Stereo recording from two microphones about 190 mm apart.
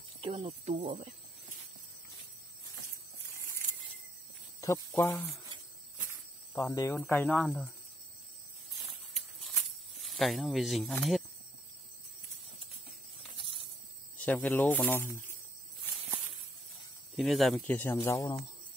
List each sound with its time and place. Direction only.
0.2 s speech: 30° right (ahead or behind)
4.6 s speech: 15° left (ahead or behind)
6.5 s speech: 15° left (ahead or behind); by 7.6 s 5° right (ahead or behind)
9.1 s a sound: centre (ahead or behind)
14.1 s speech: 10° left (ahead or behind)
17.2 s speech: centre (ahead or behind)
17.6 s speech: 10° left (ahead or behind)